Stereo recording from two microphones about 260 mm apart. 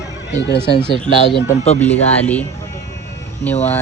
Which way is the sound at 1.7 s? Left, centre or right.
Centre.